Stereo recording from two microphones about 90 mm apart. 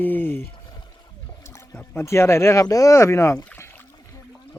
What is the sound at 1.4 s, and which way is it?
Speech, 30° left (ahead or behind).